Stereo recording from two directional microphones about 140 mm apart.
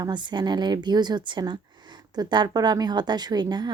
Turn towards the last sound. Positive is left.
turn(degrees=-30)  # may be behind; listen again after turning